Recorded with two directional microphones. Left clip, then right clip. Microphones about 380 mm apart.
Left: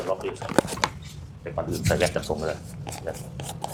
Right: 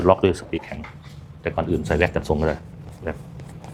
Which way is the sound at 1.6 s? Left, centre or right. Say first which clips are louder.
Right 3 dB; right.